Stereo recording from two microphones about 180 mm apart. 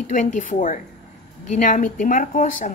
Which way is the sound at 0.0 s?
45° left (ahead or behind).